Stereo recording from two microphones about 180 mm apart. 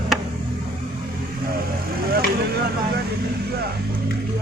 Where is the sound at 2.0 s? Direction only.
55° right (ahead or behind).